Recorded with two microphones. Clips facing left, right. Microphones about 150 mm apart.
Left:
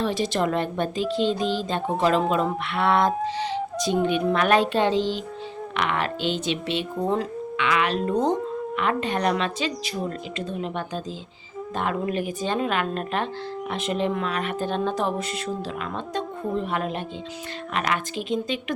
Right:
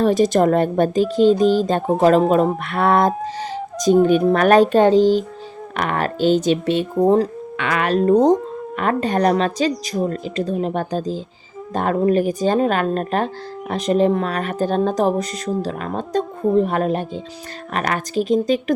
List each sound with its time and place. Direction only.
0.0 s speech: 45° right (ahead or behind)